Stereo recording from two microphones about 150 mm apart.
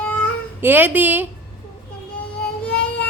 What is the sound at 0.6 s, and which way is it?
Speech, 10° right (ahead or behind).